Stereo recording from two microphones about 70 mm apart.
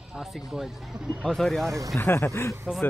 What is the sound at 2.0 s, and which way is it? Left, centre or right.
Speech, left.